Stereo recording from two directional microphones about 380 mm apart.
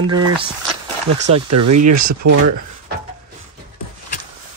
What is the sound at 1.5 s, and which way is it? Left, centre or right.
Speech, right.